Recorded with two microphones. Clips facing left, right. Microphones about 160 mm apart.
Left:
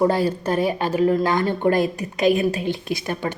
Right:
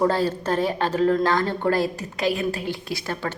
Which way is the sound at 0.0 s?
15° left (ahead or behind).